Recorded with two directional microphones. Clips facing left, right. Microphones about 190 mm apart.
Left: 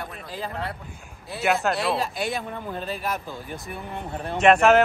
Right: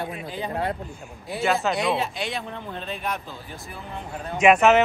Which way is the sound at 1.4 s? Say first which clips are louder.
Even; centre (ahead or behind).